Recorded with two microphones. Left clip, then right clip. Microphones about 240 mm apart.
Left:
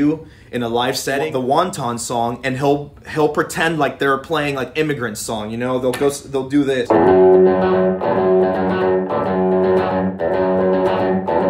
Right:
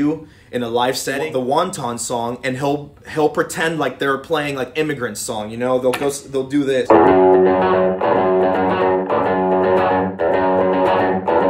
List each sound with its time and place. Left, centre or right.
0.6 s speech: centre
6.9 s music: right